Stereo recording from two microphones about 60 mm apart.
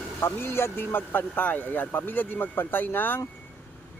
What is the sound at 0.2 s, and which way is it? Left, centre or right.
Speech, left.